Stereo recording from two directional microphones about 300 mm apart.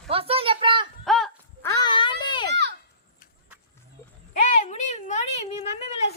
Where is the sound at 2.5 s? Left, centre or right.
Right.